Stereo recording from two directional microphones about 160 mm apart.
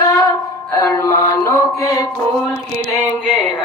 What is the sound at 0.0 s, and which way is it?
Music, 20° left (ahead or behind).